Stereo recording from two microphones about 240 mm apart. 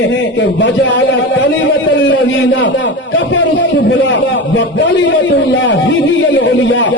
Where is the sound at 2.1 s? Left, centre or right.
Left.